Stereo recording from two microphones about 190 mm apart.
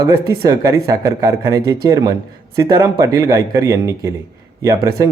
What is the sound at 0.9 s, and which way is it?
Speech, 20° right (ahead or behind).